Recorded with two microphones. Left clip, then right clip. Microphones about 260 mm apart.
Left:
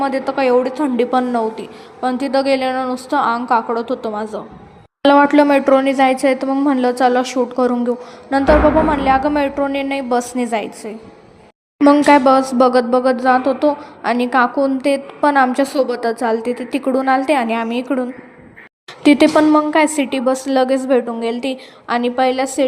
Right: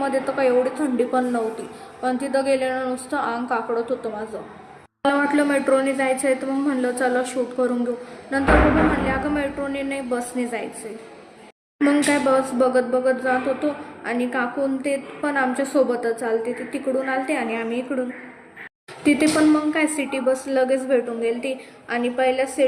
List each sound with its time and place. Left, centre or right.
0.0 s a woman's voice: left
9.0 s a woman's voice: left
11.8 s speech: left
19.0 s a woman's voice: left